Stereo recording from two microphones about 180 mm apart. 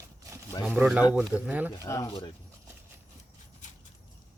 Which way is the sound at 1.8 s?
15° left (ahead or behind).